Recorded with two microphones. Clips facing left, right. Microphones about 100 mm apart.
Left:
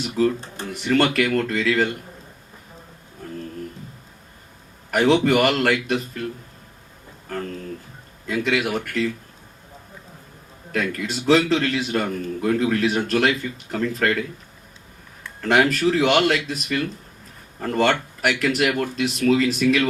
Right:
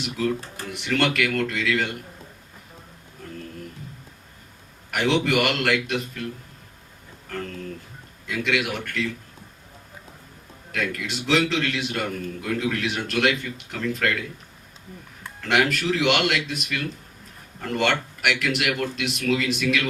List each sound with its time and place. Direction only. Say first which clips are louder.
0.7 s a man's voice: left 4 dB; 40° left (ahead or behind)
4.9 s a man's voice: left 5 dB; 40° left (ahead or behind)
8.3 s a man's voice: left 3 dB; 40° left (ahead or behind)
10.7 s a man's voice: left 3 dB; 35° left (ahead or behind)
15.4 s a man's voice: left 4 dB; 40° left (ahead or behind)